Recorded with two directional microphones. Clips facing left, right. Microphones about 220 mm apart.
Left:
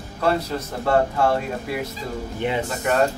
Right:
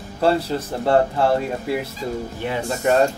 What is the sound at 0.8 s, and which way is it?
Speech, 30° right (ahead or behind).